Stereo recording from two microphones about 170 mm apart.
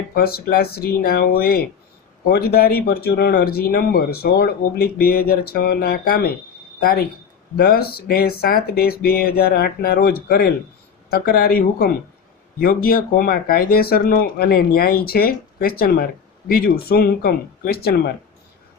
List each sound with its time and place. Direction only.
0.1 s speech: 60° left (ahead or behind)